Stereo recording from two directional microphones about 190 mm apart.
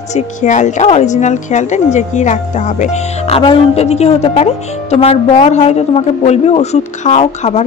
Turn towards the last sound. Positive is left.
turn(degrees=35)  # may be behind; listen again after turning